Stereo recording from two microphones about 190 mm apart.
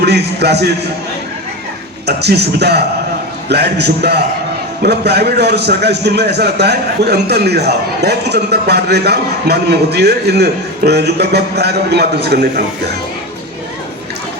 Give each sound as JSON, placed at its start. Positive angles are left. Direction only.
{"t": 0.0, "sound": "a man's voice", "side_deg": -60}
{"t": 2.0, "sound": "a man's voice", "side_deg": -60}